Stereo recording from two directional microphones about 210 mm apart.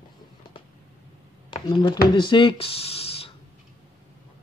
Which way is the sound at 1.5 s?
25° left (ahead or behind).